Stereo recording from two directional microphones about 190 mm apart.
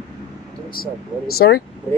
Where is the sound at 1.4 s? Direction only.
55° left (ahead or behind).